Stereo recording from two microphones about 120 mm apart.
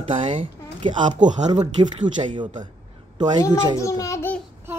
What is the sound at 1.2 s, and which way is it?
Speech, 75° right (ahead or behind).